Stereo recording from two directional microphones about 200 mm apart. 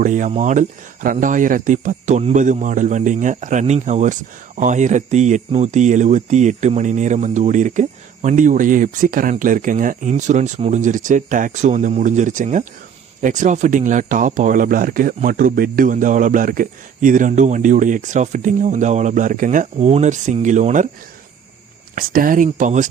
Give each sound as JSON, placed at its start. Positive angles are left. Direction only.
{"t": 0.0, "sound": "speech", "side_deg": -40}
{"t": 21.9, "sound": "speech", "side_deg": -45}